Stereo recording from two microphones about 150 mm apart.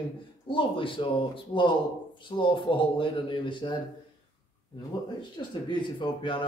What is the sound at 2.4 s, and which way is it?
Speech, 35° left (ahead or behind).